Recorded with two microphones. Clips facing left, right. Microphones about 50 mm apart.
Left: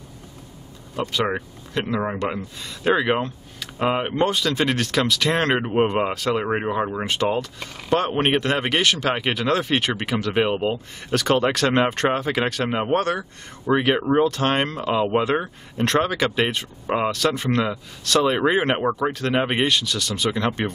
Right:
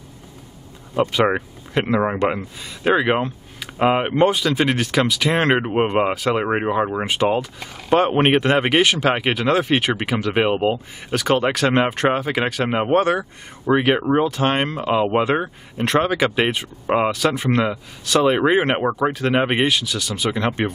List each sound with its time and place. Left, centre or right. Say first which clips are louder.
0.9 s speech: right 6 dB; right
2.8 s speech: right 2 dB; centre